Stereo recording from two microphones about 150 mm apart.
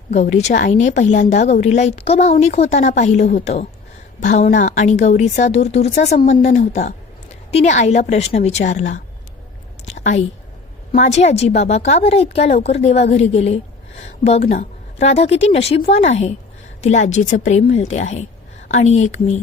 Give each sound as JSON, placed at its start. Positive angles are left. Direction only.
{"t": 0.1, "sound": "a woman's voice", "side_deg": 50}
{"t": 9.8, "sound": "a sound", "side_deg": 55}
{"t": 10.9, "sound": "a woman's voice", "side_deg": 50}